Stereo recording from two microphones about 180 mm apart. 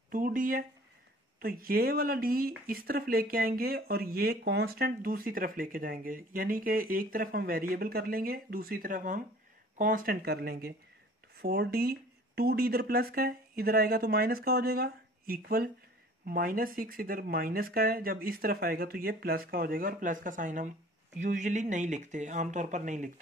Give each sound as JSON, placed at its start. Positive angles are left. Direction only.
{"t": 0.1, "sound": "speech", "side_deg": -50}